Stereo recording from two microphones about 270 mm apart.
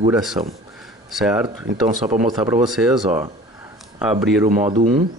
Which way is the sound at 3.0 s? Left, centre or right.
Right.